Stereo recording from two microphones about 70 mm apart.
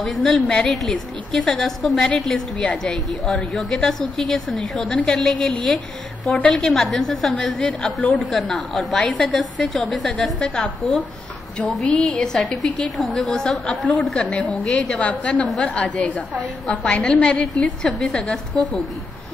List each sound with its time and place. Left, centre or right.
0.0 s a woman's voice: centre
7.5 s a woman's voice: centre
8.3 s a woman's voice: centre
9.0 s a woman's voice: centre
9.9 s a woman's voice: centre
14.3 s a woman's voice: centre